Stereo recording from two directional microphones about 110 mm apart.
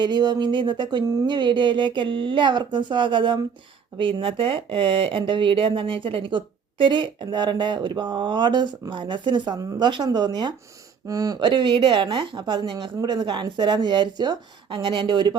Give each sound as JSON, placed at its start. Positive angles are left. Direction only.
{"t": 0.0, "sound": "speech", "side_deg": -40}